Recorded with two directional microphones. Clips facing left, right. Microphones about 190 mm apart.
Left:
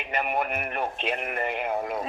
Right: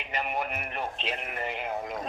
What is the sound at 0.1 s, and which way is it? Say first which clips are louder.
Speech: left 4 dB; 55° left (ahead or behind).